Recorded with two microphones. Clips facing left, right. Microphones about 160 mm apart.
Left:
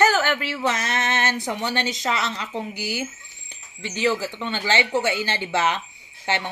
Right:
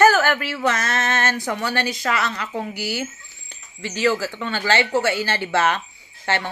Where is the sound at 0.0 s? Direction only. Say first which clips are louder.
Right 4 dB; 20° left (ahead or behind).